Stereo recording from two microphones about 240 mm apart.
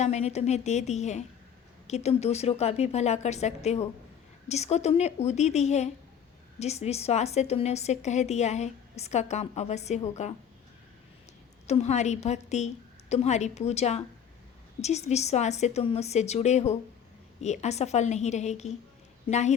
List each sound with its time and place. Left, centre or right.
0.0 s a woman's voice: left
11.6 s a woman's voice: left